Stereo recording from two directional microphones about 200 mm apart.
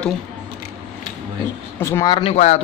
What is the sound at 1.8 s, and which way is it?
Speech, 15° left (ahead or behind).